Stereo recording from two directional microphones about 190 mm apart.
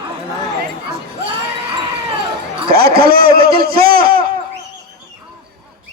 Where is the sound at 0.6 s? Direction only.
55° right (ahead or behind).